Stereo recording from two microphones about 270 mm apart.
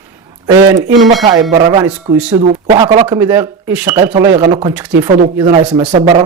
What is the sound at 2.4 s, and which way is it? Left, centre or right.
Speech, right.